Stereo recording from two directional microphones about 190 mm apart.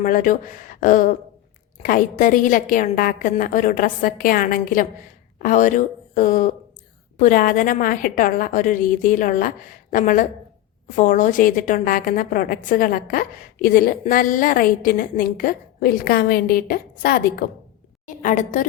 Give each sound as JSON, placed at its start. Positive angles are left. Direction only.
{"t": 0.0, "sound": "a woman's voice", "side_deg": 45}